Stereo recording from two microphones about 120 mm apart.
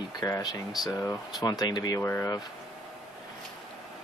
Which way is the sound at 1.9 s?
20° left (ahead or behind).